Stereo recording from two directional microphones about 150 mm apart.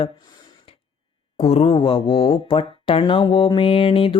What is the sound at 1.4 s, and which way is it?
Speech, 45° left (ahead or behind).